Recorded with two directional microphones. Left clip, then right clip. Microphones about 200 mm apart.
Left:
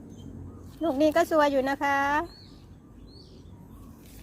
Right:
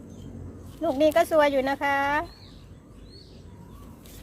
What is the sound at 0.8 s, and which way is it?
Speech, 15° left (ahead or behind).